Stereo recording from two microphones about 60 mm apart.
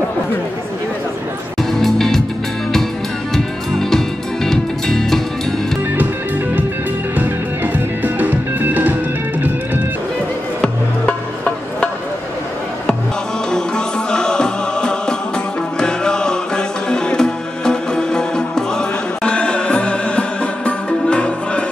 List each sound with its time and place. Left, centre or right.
1.6 s music: centre
3.3 s music: centre
7.2 s music: right
10.6 s music: centre
13.5 s music: centre